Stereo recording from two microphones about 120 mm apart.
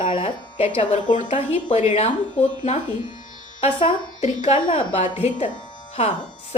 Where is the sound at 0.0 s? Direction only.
50° left (ahead or behind).